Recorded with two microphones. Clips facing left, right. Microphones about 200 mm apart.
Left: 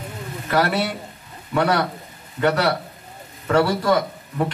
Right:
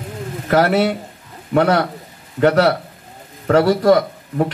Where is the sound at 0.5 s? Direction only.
50° right (ahead or behind).